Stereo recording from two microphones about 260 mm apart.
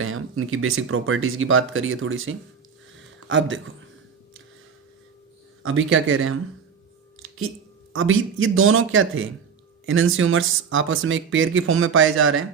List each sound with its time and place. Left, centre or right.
0.0 s speech: right
5.6 s speech: right
7.5 s speech: right